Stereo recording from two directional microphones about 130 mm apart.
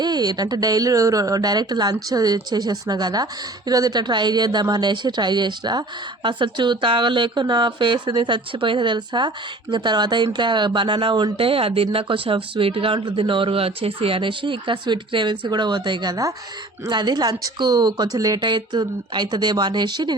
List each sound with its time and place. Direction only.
0.0 s speech: 30° right (ahead or behind)